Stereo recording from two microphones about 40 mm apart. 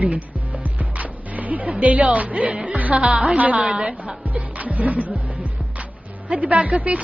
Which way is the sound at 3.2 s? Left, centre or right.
Right.